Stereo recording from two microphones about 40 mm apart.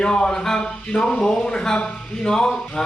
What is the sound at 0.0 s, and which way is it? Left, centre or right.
A man's voice, left.